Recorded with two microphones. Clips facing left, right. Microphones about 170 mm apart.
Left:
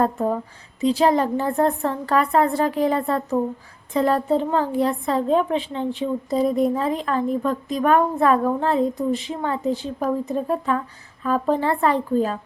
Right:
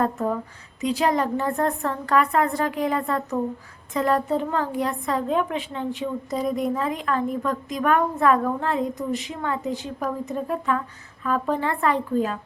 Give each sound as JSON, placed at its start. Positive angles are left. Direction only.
{"t": 0.8, "sound": "a woman's voice", "side_deg": 30}